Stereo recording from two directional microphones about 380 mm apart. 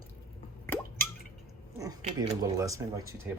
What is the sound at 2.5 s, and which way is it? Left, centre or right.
Speech, centre.